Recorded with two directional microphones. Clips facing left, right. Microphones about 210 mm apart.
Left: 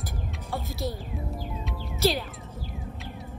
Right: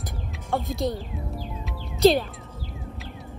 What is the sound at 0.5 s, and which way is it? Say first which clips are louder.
Music: right 7 dB; 55° right (ahead or behind).